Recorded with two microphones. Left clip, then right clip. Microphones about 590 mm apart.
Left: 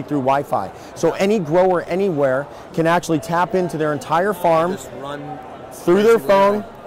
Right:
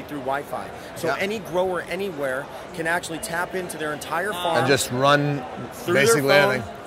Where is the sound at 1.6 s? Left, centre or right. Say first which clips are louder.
Left 6 dB; left.